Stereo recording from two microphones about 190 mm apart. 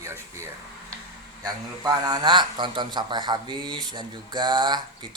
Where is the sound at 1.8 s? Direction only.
20° right (ahead or behind).